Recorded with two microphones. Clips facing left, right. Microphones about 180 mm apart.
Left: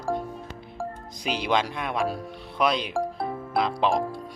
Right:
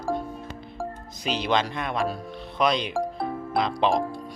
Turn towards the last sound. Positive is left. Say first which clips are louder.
# right 1 dB
turn(degrees=5)  # may be behind; listen again after turning